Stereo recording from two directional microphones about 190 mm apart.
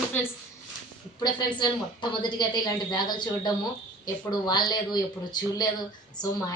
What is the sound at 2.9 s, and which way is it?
A woman's voice, 20° left (ahead or behind).